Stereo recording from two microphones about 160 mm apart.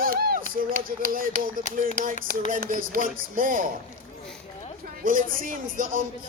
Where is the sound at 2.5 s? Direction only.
60° right (ahead or behind).